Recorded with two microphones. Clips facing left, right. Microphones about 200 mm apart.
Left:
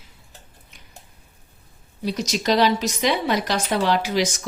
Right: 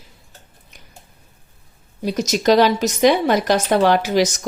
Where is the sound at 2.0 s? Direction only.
45° right (ahead or behind).